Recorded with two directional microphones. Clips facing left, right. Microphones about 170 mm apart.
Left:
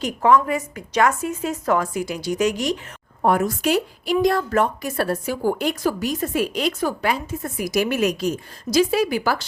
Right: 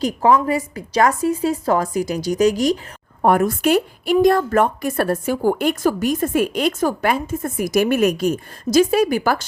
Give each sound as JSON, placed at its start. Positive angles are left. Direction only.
{"t": 0.0, "sound": "a woman's voice", "side_deg": -30}
{"t": 3.2, "sound": "a woman's voice", "side_deg": -55}